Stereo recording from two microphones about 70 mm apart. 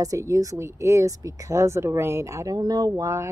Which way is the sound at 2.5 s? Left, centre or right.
Right.